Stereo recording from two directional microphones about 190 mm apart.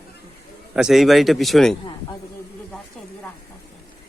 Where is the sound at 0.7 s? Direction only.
Centre (ahead or behind).